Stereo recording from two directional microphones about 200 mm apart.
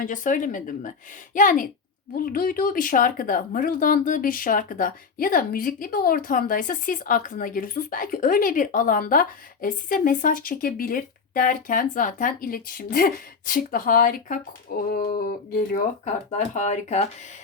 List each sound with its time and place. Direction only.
0.0 s a woman's voice: 40° left (ahead or behind)